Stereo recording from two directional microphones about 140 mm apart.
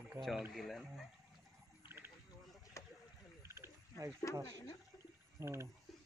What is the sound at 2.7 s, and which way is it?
Rowboat, 20° left (ahead or behind).